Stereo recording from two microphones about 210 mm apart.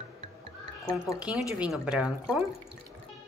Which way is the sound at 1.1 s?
5° right (ahead or behind).